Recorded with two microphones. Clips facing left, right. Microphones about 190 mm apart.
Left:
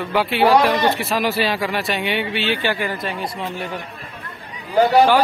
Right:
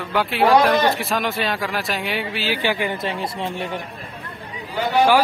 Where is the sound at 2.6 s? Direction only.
15° right (ahead or behind).